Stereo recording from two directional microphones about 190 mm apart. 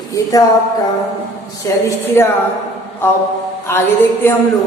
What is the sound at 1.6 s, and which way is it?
A woman's voice, 15° left (ahead or behind).